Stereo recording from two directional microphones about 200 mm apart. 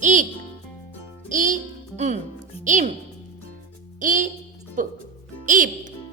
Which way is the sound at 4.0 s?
40° right (ahead or behind).